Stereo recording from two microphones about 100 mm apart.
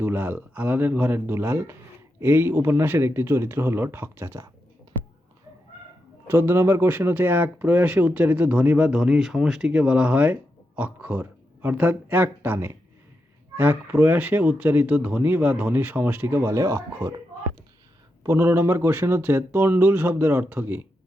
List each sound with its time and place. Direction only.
0.0 s speech: 20° right (ahead or behind)
6.2 s speech: 20° right (ahead or behind)
18.2 s speech: 25° right (ahead or behind)